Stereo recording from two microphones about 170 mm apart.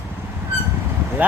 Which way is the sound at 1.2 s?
10° right (ahead or behind).